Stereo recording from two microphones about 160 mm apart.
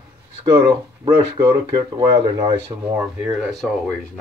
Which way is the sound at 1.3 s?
25° right (ahead or behind).